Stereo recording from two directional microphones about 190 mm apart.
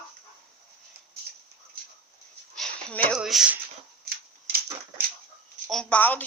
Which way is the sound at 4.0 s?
55° right (ahead or behind).